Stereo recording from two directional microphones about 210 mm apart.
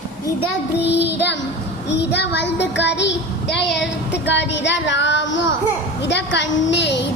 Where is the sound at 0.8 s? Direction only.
10° right (ahead or behind).